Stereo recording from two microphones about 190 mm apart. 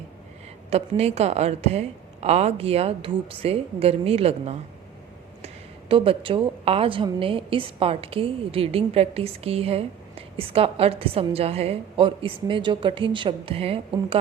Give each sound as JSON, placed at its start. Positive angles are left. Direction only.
{"t": 0.7, "sound": "a woman's voice", "side_deg": -35}
{"t": 5.9, "sound": "a woman's voice", "side_deg": -30}